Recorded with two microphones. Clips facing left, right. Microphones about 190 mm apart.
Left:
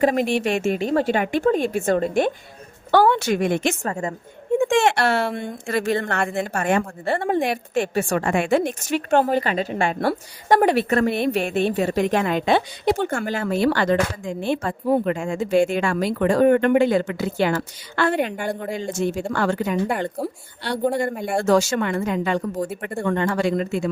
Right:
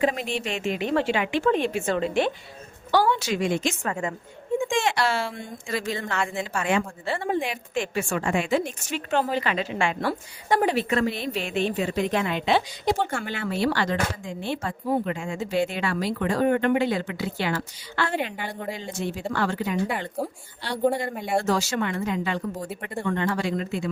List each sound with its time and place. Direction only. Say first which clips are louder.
0.0 s a woman's voice: left 6 dB; 50° left (ahead or behind)
2.9 s a woman's voice: left 5 dB; 60° left (ahead or behind)
3.8 s a woman's voice: left 2 dB; 40° left (ahead or behind)
4.5 s a woman's voice: left 6 dB; 65° left (ahead or behind); by 10.1 s 40° left (ahead or behind)
10.6 s a woman's voice: left 3 dB; 60° left (ahead or behind)
21.2 s speech: left 2 dB; centre (ahead or behind)
21.5 s a woman's voice: left 6 dB; 55° left (ahead or behind)